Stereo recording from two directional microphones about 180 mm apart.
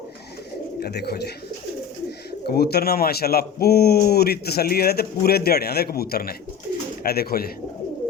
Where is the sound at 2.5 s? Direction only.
60° left (ahead or behind).